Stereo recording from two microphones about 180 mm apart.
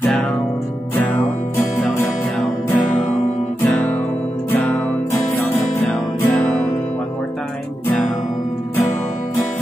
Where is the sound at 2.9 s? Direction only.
40° left (ahead or behind).